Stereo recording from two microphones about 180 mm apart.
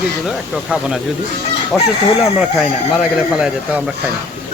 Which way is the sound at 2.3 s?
5° right (ahead or behind).